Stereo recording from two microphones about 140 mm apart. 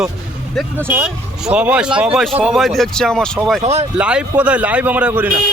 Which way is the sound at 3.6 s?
50° right (ahead or behind).